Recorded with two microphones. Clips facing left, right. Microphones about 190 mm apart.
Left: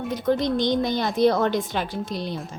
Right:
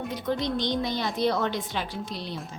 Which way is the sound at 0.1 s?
50° left (ahead or behind).